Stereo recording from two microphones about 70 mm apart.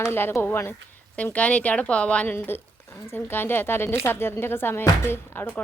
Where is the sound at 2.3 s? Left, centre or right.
Left.